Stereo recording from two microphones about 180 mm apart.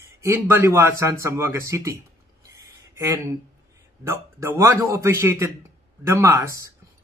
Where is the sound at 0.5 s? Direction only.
15° right (ahead or behind).